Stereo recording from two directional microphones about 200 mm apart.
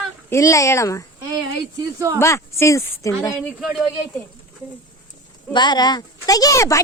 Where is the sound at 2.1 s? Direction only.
15° left (ahead or behind).